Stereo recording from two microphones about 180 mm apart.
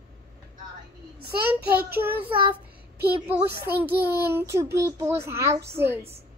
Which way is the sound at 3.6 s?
10° right (ahead or behind).